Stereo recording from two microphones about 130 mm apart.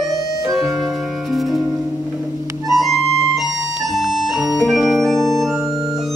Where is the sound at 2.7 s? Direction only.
Centre (ahead or behind).